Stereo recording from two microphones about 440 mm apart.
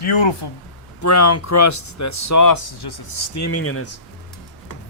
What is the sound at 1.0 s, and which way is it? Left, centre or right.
Speech, left.